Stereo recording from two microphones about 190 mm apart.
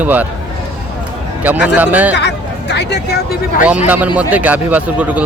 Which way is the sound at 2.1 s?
65° left (ahead or behind).